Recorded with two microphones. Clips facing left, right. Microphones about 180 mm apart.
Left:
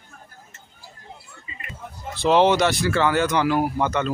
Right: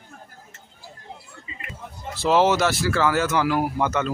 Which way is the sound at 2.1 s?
Centre (ahead or behind).